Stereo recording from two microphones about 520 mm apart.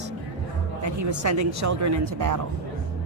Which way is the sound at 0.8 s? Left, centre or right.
Right.